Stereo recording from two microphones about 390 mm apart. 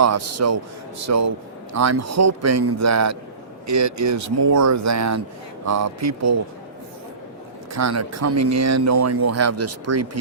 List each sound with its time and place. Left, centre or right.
0.0 s speech: right
7.7 s speech: right